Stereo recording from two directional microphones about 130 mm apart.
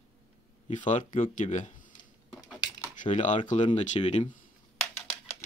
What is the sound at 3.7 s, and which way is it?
Speech, 60° left (ahead or behind).